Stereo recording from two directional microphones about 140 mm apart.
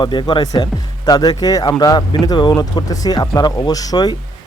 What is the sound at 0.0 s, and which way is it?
Speech, 35° left (ahead or behind).